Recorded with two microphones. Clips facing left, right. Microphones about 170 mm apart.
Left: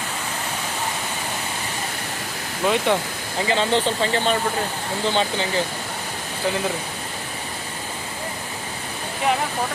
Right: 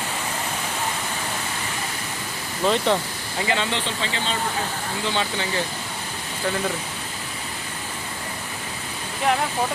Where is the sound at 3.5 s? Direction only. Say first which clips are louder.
Left 6 dB; 40° left (ahead or behind).